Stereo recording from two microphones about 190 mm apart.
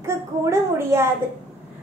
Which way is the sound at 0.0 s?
15° right (ahead or behind).